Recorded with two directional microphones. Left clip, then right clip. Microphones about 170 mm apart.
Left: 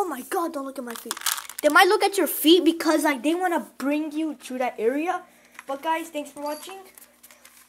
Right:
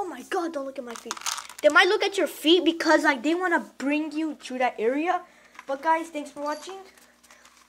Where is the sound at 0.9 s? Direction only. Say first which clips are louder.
Left 3 dB; 5° left (ahead or behind).